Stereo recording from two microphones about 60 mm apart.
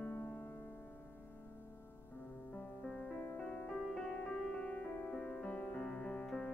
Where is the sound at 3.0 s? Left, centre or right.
Left.